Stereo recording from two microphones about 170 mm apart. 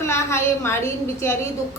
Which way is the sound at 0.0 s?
15° left (ahead or behind).